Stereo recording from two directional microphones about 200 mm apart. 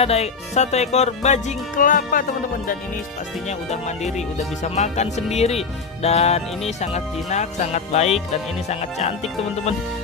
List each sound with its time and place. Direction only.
0.0 s speech: 30° left (ahead or behind)
3.4 s speech: 35° left (ahead or behind)